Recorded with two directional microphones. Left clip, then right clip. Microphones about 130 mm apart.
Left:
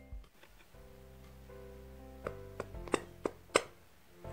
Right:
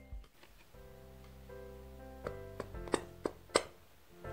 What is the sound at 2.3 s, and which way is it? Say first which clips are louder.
Music: left 1 dB; 25° left (ahead or behind).